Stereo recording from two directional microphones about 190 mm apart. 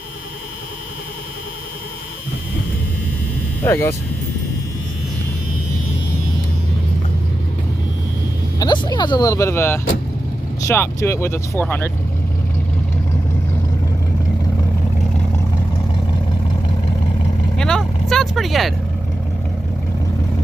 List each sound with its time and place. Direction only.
3.6 s speech: 10° left (ahead or behind)
8.5 s vehicle: 20° left (ahead or behind)
10.6 s speech: 15° left (ahead or behind)
17.6 s vehicle: 5° left (ahead or behind)